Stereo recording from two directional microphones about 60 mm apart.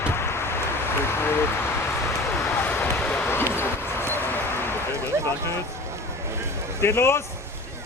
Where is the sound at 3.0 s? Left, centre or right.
Left.